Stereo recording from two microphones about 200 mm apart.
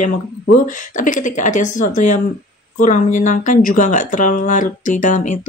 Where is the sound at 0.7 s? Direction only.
40° left (ahead or behind).